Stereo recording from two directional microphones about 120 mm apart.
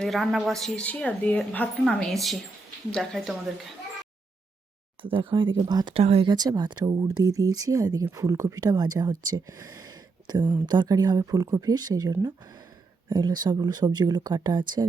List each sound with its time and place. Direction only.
0.0 s speech: centre (ahead or behind)
0.9 s a woman's voice: 10° left (ahead or behind)
5.0 s speech: 45° right (ahead or behind)
5.9 s speech: 55° right (ahead or behind)
6.2 s speech: 35° right (ahead or behind)
10.4 s speech: 15° right (ahead or behind)
10.7 s speech: 35° right (ahead or behind)